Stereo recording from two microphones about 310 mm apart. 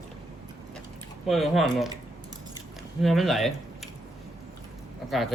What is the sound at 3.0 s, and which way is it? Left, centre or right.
Speech, centre.